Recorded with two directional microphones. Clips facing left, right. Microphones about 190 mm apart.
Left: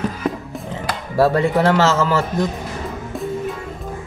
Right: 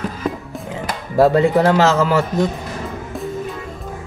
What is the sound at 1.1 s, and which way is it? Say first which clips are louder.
A man's voice: right 3 dB; 15° right (ahead or behind).